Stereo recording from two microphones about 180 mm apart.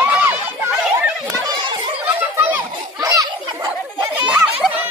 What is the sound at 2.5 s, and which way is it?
Children playing, 20° right (ahead or behind).